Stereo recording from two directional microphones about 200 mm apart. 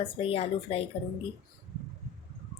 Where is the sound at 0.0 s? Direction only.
25° left (ahead or behind).